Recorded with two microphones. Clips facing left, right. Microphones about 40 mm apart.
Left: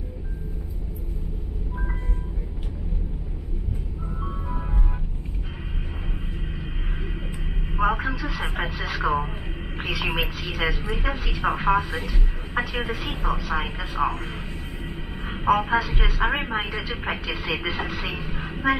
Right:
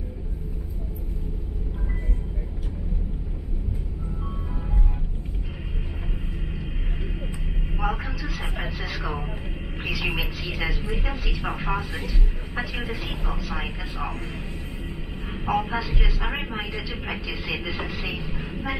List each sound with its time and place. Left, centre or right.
7.7 s vehicle: left
8.0 s a sound: left
8.7 s radio: left
9.8 s speech: left
15.2 s speech: left